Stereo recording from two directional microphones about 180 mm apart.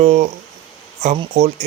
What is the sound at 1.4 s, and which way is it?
Speech, 40° right (ahead or behind).